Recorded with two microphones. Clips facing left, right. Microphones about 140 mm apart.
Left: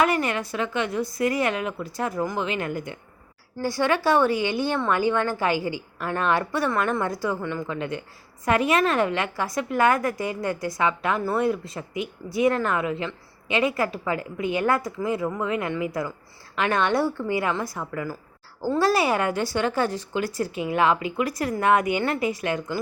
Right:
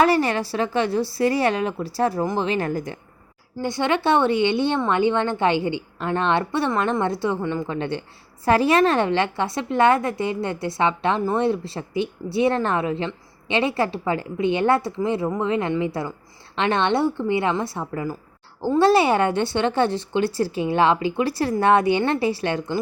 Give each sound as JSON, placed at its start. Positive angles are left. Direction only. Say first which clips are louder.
{"t": 0.0, "sound": "a woman's voice", "louder": "right 4 dB", "side_deg": -35}
{"t": 3.6, "sound": "a woman's voice", "louder": "right 1 dB", "side_deg": -20}